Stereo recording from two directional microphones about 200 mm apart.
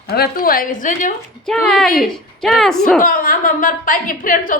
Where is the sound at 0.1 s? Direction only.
50° left (ahead or behind).